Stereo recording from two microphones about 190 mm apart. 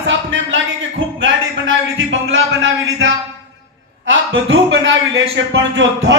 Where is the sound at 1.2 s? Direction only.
85° right.